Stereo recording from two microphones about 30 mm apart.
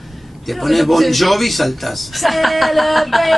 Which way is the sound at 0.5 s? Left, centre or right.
Centre.